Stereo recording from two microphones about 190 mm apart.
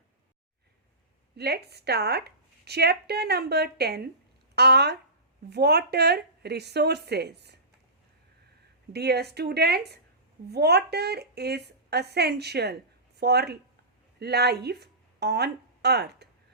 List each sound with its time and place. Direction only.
1.4 s a woman's voice: 55° right (ahead or behind)
8.9 s a woman's voice: 60° right (ahead or behind)